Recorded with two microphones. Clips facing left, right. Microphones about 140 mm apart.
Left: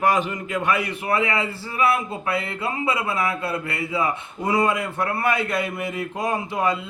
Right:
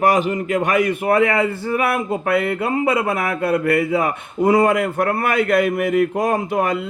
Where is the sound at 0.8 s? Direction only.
45° right (ahead or behind).